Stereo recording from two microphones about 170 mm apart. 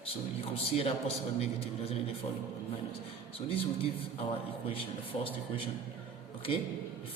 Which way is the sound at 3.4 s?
35° left (ahead or behind).